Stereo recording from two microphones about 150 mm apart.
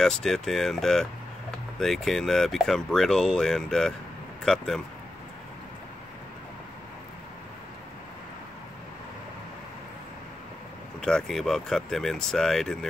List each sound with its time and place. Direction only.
0.0 s speech: 5° left (ahead or behind)
11.0 s speech: 5° left (ahead or behind)